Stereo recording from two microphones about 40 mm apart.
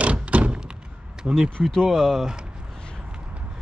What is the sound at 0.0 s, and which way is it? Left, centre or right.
Thunk, right.